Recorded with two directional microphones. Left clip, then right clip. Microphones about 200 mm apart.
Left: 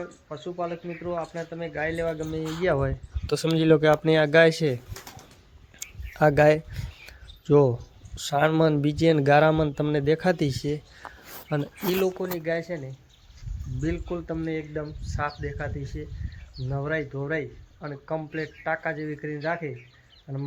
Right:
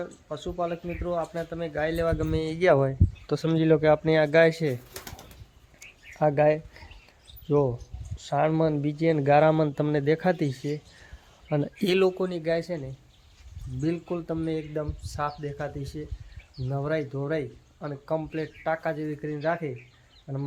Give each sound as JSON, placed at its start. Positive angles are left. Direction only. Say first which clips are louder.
{"t": 0.0, "sound": "speech", "louder": "right 1 dB", "side_deg": -20}
{"t": 2.1, "sound": "speech", "louder": "right 2 dB", "side_deg": -45}
{"t": 3.2, "sound": "speech", "louder": "left 2 dB", "side_deg": 10}
{"t": 5.8, "sound": "a sound", "louder": "left 3 dB", "side_deg": 15}
{"t": 7.4, "sound": "speech", "louder": "left 5 dB", "side_deg": 20}
{"t": 11.5, "sound": "speech", "louder": "right 1 dB", "side_deg": -5}
{"t": 11.9, "sound": "speech", "louder": "right 2 dB", "side_deg": -40}
{"t": 12.2, "sound": "speech", "louder": "right 1 dB", "side_deg": -10}